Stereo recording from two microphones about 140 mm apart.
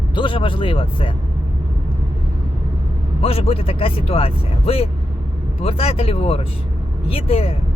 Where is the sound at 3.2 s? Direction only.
45° left (ahead or behind).